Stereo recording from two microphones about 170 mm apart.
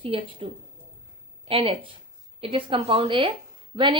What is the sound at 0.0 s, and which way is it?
Speech, 30° right (ahead or behind).